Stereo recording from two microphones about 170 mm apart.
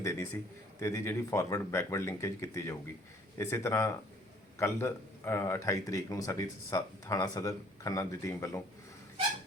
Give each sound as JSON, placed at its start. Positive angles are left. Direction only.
{"t": 0.0, "sound": "a man's voice", "side_deg": 15}